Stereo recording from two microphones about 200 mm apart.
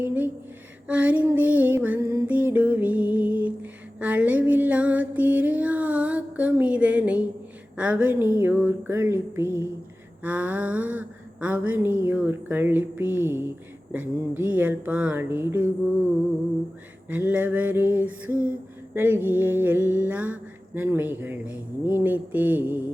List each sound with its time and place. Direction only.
0.0 s music: 10° right (ahead or behind)
17.1 s music: 10° right (ahead or behind)